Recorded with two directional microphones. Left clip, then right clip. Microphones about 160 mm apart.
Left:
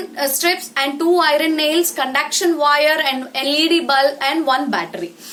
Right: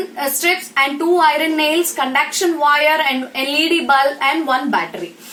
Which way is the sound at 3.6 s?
20° left (ahead or behind).